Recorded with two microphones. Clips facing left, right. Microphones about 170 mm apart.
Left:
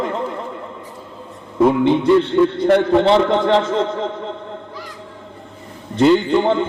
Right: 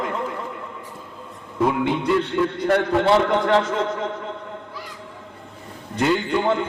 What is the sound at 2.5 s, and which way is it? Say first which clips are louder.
A man's voice: left 6 dB; 25° left (ahead or behind).